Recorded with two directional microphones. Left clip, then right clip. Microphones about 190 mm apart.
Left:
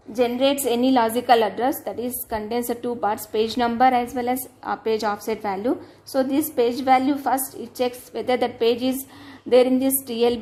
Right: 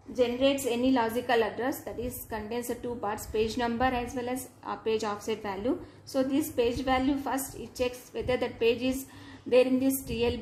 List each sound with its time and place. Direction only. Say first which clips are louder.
0.1 s a woman's voice: left 6 dB; 55° left (ahead or behind)